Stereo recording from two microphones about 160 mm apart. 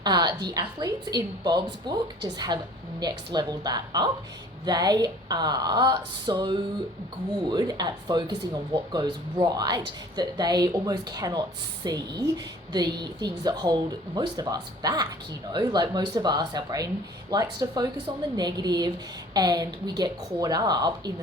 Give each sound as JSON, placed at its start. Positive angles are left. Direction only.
{"t": 0.0, "sound": "speech", "side_deg": -25}